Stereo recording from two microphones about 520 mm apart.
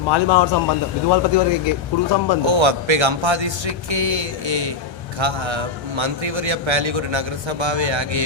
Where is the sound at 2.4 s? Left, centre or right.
Right.